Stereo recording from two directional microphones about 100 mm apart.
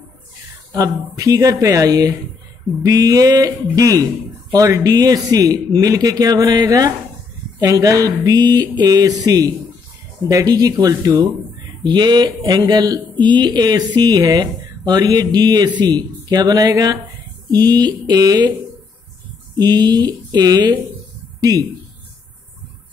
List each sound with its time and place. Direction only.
0.7 s speech: 35° right (ahead or behind)
19.5 s speech: 45° right (ahead or behind)